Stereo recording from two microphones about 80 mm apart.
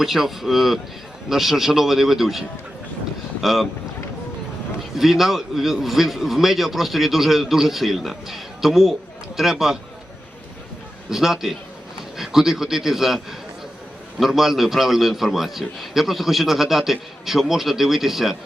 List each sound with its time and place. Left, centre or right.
0.0 s a man's voice: centre
3.4 s a man's voice: centre
4.9 s a man's voice: centre
11.1 s a man's voice: centre